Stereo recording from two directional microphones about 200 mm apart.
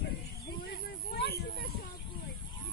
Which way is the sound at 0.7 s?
55° left (ahead or behind).